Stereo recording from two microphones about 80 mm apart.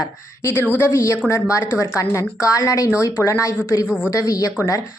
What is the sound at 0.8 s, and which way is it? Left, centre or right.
A woman's voice, left.